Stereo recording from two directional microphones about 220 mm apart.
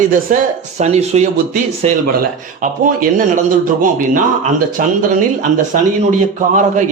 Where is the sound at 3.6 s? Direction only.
35° right (ahead or behind).